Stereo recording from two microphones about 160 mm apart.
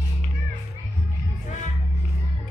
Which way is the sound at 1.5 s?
45° left (ahead or behind).